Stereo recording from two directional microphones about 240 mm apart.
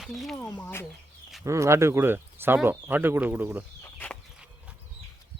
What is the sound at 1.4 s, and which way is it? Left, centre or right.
Speech, centre.